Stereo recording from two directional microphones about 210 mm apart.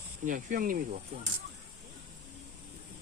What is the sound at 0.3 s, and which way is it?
Speech, 40° right (ahead or behind).